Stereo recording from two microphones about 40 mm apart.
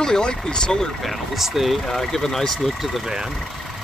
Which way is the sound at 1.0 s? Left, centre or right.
Centre.